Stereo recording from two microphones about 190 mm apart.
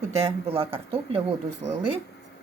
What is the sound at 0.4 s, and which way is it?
Speech, 30° right (ahead or behind).